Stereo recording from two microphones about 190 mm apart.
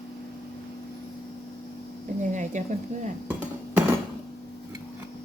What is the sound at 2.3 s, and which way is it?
Speech, 40° right (ahead or behind).